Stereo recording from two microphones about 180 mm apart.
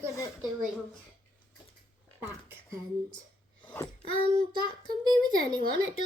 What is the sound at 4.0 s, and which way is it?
Speech, 30° left (ahead or behind).